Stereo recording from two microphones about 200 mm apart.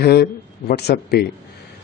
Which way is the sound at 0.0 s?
55° left (ahead or behind).